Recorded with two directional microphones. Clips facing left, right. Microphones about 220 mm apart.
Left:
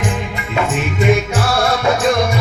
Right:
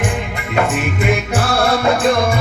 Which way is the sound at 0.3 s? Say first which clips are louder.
Right 3 dB; 55° right (ahead or behind).